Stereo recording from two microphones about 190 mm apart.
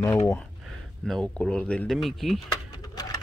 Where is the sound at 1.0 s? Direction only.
5° left (ahead or behind).